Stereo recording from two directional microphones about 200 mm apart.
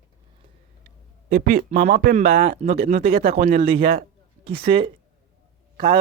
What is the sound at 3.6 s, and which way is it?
A man's voice, 30° right (ahead or behind).